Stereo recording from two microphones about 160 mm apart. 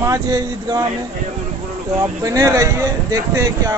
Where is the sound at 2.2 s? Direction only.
20° right (ahead or behind).